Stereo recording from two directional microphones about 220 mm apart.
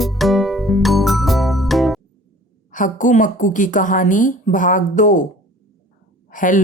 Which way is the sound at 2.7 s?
35° left (ahead or behind).